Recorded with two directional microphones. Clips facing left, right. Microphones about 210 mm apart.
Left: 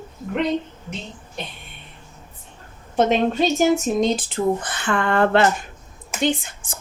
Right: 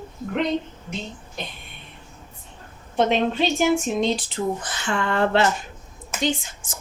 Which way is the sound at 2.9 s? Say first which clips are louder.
Left 2 dB; 45° left (ahead or behind).